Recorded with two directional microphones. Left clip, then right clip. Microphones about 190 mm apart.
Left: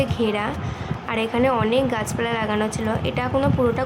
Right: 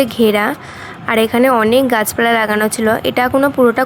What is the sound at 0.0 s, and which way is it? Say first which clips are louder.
A woman's voice: right 10 dB; 35° right (ahead or behind).